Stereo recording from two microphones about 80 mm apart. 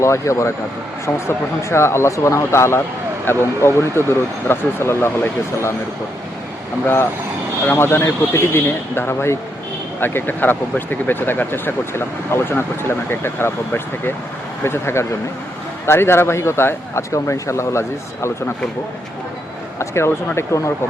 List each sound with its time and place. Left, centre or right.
0.0 s speech: left
6.8 s speech: left
19.8 s speech: left